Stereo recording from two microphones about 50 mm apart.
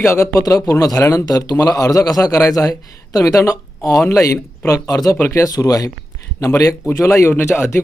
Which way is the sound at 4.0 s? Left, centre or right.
Left.